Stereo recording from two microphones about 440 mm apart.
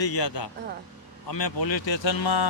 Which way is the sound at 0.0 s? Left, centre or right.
Left.